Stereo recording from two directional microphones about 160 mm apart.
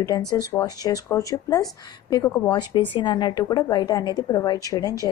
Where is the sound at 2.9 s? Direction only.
30° left (ahead or behind).